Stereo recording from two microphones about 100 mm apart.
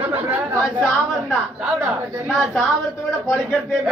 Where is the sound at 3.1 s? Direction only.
25° left (ahead or behind).